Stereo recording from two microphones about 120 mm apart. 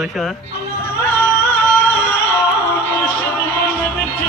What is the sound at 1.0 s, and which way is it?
Music, 15° left (ahead or behind).